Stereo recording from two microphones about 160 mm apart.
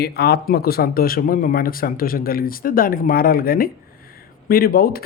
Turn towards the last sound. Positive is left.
turn(degrees=70)  # may be behind; listen again after turning